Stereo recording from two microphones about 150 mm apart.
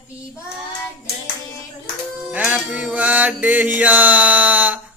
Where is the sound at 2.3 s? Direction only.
10° right (ahead or behind).